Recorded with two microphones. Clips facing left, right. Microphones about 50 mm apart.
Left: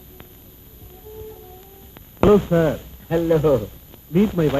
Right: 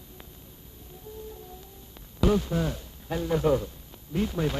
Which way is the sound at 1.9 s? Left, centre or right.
Left.